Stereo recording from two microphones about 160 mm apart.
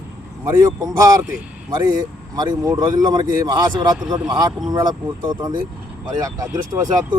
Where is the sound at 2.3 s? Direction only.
25° right (ahead or behind).